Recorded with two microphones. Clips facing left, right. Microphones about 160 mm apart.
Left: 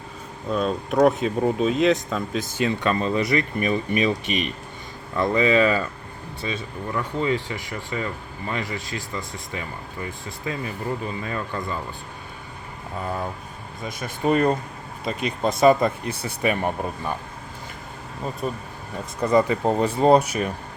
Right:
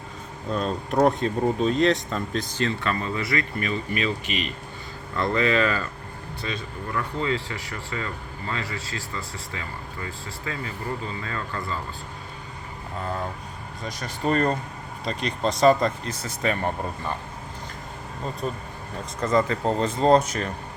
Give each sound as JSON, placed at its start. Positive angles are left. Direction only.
{"t": 0.5, "sound": "speech", "side_deg": 5}
{"t": 2.6, "sound": "speech", "side_deg": 15}
{"t": 5.1, "sound": "speech", "side_deg": 15}
{"t": 13.8, "sound": "speech", "side_deg": 5}
{"t": 18.2, "sound": "speech", "side_deg": 5}